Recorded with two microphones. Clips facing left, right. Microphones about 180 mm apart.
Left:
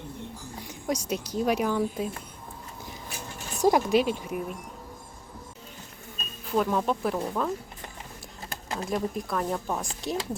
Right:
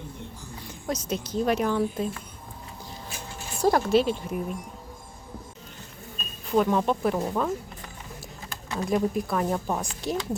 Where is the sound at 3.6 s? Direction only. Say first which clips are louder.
Right 1 dB; 15° left (ahead or behind).